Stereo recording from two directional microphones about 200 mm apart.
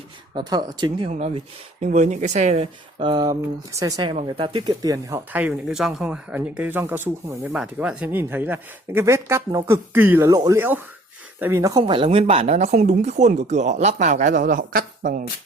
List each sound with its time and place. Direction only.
0.3 s speech: 20° right (ahead or behind)
1.1 s speech: 35° right (ahead or behind); by 11.8 s 15° right (ahead or behind)
11.8 s speech: 25° right (ahead or behind); by 15.2 s 45° right (ahead or behind)